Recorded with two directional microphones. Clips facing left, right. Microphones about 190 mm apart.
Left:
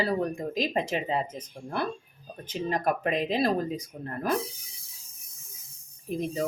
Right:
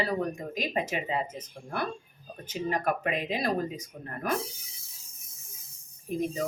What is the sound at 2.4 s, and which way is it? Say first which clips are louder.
Speech: left 1 dB; 35° left (ahead or behind).